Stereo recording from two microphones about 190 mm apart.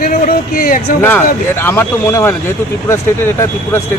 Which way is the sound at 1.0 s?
10° left (ahead or behind).